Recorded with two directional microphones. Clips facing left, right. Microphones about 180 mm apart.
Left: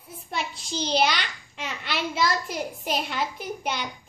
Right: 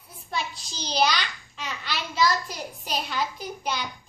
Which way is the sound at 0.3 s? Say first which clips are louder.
Left 1 dB; 25° left (ahead or behind).